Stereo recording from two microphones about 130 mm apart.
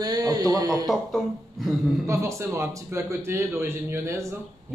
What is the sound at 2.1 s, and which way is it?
A man's voice, 20° right (ahead or behind).